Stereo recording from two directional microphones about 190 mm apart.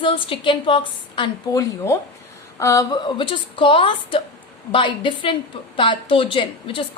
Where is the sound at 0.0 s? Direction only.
25° left (ahead or behind).